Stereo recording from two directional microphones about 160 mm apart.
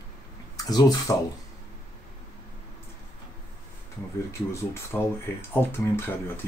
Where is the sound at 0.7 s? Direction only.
25° left (ahead or behind).